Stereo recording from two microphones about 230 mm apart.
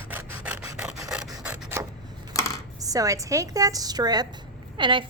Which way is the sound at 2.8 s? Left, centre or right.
Centre.